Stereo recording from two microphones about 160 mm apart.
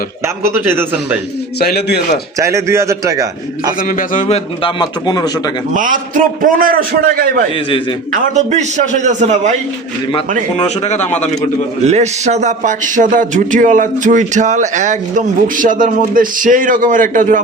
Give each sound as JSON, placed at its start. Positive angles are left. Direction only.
{"t": 0.4, "sound": "a man's voice", "side_deg": -15}
{"t": 1.5, "sound": "a man's voice", "side_deg": 85}
{"t": 2.4, "sound": "a man's voice", "side_deg": -20}
{"t": 3.8, "sound": "a man's voice", "side_deg": 60}
{"t": 4.6, "sound": "a man's voice", "side_deg": 25}
{"t": 5.7, "sound": "a man's voice", "side_deg": -55}
{"t": 8.1, "sound": "speech", "side_deg": -45}
{"t": 10.1, "sound": "a man's voice", "side_deg": 30}
{"t": 10.8, "sound": "speech", "side_deg": 45}
{"t": 11.9, "sound": "speech", "side_deg": -45}